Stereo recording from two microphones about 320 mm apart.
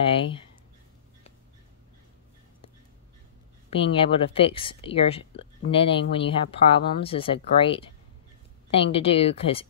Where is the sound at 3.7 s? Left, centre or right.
Centre.